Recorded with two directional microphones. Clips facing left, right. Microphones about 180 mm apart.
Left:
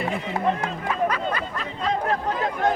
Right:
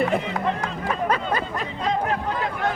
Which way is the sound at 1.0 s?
30° right (ahead or behind).